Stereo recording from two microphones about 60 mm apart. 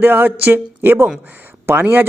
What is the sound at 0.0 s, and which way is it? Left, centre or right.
A man's voice, right.